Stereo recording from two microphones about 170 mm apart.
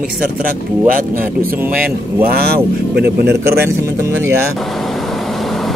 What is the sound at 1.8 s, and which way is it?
Speech, 65° right (ahead or behind).